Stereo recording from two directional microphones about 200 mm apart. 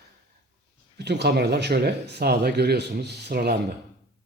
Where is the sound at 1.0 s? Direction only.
55° right (ahead or behind).